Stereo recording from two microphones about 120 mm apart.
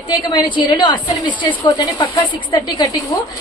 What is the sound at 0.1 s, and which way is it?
A woman's voice, 35° left (ahead or behind).